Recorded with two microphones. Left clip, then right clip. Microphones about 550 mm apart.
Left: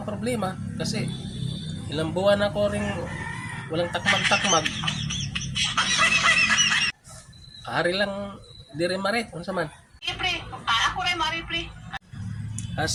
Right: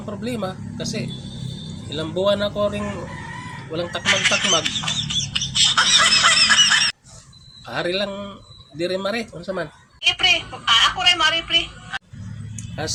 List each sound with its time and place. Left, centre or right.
0.3 s speech: left
4.0 s speech: centre
4.6 s fowl: centre
7.6 s speech: left
10.0 s telephone: left